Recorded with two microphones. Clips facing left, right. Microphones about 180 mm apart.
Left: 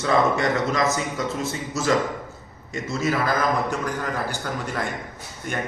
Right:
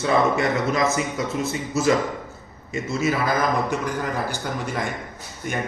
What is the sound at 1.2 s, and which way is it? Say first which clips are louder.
Speech: right 2 dB; 50° right (ahead or behind).